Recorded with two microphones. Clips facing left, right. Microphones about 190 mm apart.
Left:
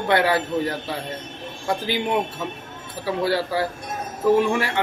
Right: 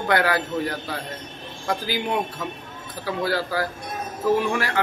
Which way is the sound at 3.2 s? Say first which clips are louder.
Left 2 dB; 30° left (ahead or behind).